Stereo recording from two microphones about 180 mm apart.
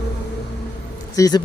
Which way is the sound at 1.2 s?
20° left (ahead or behind).